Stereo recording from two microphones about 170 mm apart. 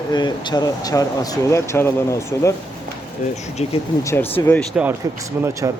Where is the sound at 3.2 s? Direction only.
45° left (ahead or behind).